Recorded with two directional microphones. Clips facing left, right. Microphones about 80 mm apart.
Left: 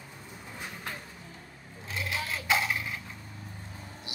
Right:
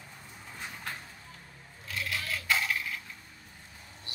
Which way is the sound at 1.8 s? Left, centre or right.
Left.